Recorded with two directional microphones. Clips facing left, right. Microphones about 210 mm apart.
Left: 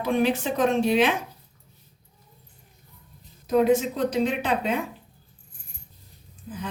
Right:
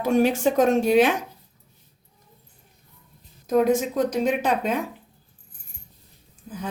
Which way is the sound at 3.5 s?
45° right (ahead or behind).